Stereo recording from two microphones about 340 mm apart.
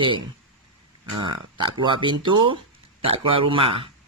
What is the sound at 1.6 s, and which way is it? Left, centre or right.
A man's voice, centre.